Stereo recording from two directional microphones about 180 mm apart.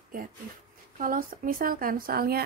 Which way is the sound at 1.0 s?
50° right (ahead or behind).